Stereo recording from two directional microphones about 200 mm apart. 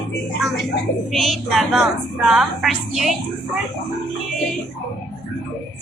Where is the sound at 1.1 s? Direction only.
Centre (ahead or behind).